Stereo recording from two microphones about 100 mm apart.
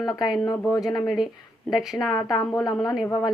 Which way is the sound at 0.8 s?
40° left (ahead or behind).